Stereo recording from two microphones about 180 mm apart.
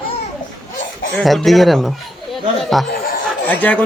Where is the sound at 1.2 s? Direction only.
Centre (ahead or behind).